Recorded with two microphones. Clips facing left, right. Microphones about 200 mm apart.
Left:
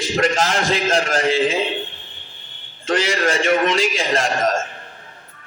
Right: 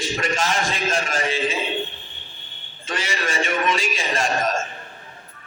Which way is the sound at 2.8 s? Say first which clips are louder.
Left 8 dB; 75° left (ahead or behind).